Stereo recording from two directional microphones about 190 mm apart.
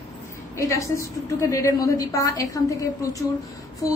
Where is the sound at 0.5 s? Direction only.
15° left (ahead or behind).